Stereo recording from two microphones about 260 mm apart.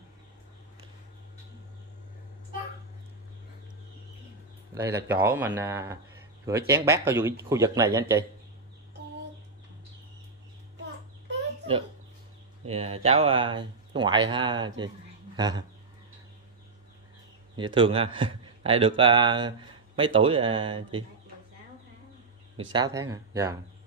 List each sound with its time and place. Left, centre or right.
4.7 s speech: centre
12.6 s speech: right
17.6 s speech: centre
22.7 s speech: centre